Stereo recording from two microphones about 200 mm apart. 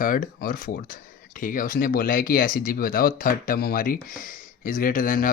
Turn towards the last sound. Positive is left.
turn(degrees=45)  # may be behind; listen again after turning